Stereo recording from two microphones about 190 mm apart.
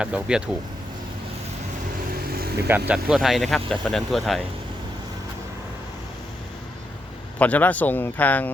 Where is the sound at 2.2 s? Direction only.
55° right (ahead or behind).